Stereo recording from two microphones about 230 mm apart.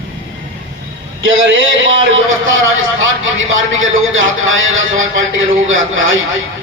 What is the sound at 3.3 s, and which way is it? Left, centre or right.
A man's voice, right.